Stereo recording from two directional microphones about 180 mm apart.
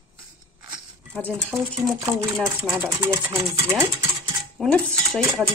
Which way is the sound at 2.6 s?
15° right (ahead or behind).